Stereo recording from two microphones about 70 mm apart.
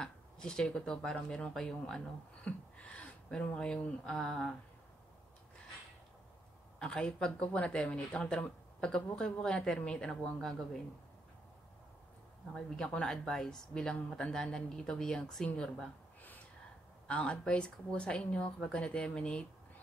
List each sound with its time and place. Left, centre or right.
0.0 s speech: centre
6.8 s speech: centre
12.5 s speech: centre
17.1 s speech: centre